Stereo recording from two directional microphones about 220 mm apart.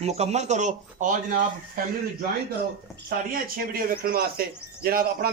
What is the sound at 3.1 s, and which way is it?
A man's voice, 40° right (ahead or behind).